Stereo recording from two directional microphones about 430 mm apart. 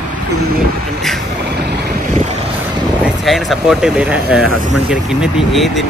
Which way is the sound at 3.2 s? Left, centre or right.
Centre.